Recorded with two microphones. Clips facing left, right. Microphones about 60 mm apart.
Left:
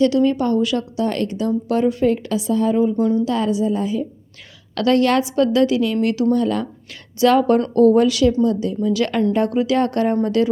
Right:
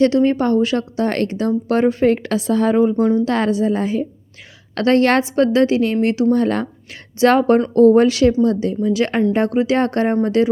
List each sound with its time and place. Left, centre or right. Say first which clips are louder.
0.0 s speech: right 2 dB; right
3.2 s a woman's voice: right 2 dB; right
4.7 s speech: right 2 dB; right
6.3 s speech: right 2 dB; right